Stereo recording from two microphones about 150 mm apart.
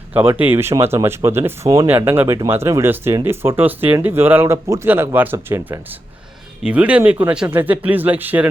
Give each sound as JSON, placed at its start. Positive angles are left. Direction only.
{"t": 0.1, "sound": "speech", "side_deg": -10}